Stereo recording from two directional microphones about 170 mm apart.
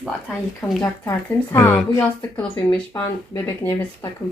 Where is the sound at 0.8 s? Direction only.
15° left (ahead or behind).